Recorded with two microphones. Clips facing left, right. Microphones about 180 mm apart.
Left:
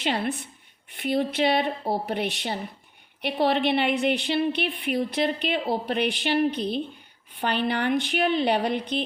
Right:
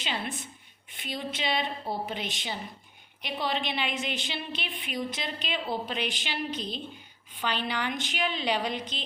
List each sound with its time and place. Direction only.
0.0 s a woman's voice: 60° left (ahead or behind)